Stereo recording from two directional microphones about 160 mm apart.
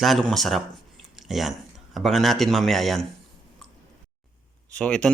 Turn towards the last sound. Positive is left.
turn(degrees=5)  # may be behind; listen again after turning